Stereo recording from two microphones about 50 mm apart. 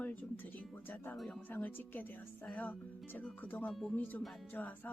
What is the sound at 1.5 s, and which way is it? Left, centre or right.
Speech, left.